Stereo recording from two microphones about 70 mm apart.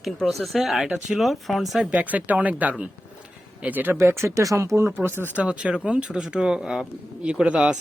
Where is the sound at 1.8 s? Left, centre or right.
Right.